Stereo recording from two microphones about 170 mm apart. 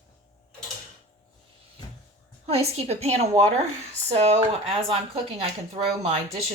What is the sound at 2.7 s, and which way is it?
Speech, 40° right (ahead or behind).